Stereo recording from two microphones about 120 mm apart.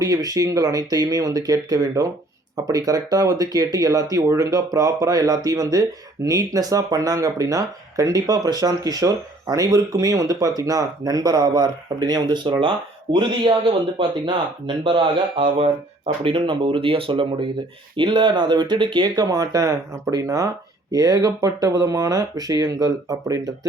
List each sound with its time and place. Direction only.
0.0 s speech: 30° right (ahead or behind)